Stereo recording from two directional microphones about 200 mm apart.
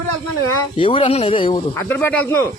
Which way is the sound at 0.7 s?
25° left (ahead or behind).